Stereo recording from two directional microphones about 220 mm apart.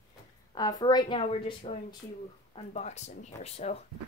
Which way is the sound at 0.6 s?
15° left (ahead or behind).